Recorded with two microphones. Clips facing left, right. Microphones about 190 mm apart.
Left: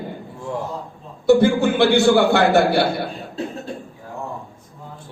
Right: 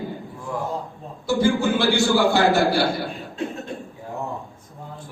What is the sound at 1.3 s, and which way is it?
A man's voice, 60° left (ahead or behind).